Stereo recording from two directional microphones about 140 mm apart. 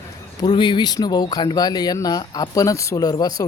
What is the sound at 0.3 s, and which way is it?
Speech, 35° left (ahead or behind).